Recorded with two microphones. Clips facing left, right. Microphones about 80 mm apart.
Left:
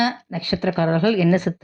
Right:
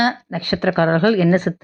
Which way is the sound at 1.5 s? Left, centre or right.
Right.